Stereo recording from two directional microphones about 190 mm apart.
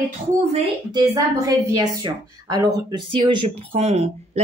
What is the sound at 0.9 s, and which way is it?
A woman's voice, 20° right (ahead or behind).